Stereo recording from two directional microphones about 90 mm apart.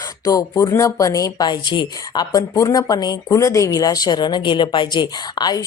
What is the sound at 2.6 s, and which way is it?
Speech, 40° left (ahead or behind).